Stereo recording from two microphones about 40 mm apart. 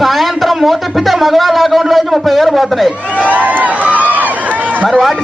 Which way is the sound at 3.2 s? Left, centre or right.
Right.